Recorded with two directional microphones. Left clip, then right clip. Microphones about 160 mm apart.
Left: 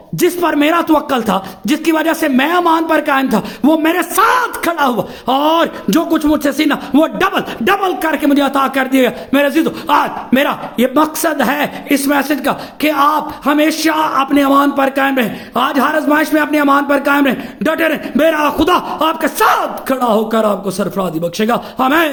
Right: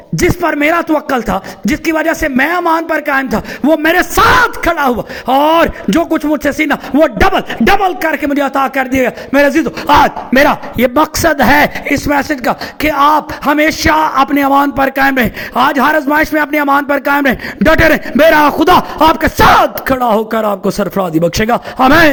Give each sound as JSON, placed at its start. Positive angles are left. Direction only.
{"t": 0.2, "sound": "a man's voice", "side_deg": -25}
{"t": 10.8, "sound": "a man's voice", "side_deg": -55}